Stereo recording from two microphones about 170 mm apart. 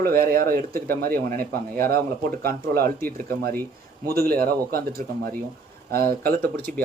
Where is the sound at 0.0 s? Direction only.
60° right (ahead or behind).